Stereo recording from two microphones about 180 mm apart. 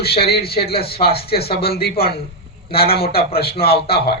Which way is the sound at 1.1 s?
60° left (ahead or behind).